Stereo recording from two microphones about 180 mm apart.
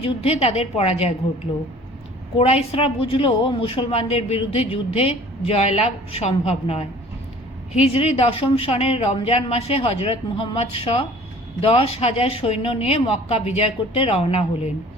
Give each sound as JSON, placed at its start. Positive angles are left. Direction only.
{"t": 0.0, "sound": "a woman's voice", "side_deg": 35}
{"t": 2.4, "sound": "a woman's voice", "side_deg": 35}